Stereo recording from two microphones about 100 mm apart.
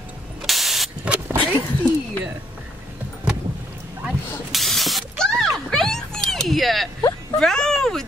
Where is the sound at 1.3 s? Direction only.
15° left (ahead or behind).